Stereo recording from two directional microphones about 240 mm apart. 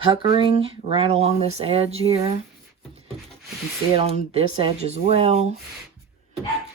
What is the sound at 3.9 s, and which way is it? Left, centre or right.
Rub, right.